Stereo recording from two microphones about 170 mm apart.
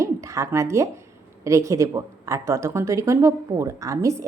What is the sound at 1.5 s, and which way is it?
A woman's voice, 20° right (ahead or behind).